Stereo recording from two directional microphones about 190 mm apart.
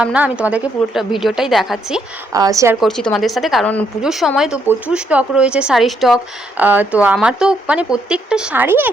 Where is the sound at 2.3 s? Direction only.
20° right (ahead or behind).